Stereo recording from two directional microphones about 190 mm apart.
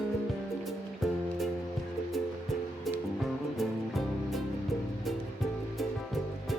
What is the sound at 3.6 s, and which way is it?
Music, centre (ahead or behind).